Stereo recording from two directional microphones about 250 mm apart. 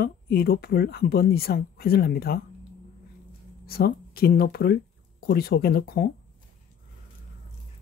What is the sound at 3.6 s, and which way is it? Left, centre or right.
Speech, left.